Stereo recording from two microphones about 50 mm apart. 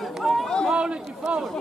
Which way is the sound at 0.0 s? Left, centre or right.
Centre.